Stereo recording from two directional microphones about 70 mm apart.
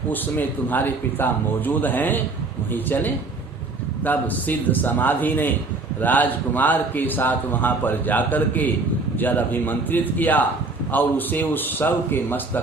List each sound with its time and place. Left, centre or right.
0.1 s a man's voice: left